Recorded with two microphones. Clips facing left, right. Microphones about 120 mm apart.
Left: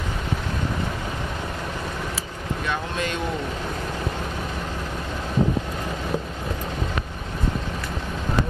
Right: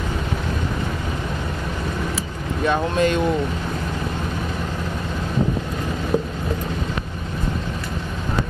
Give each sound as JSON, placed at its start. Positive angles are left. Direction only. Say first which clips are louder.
{"t": 2.6, "sound": "speech", "louder": "right 9 dB", "side_deg": -35}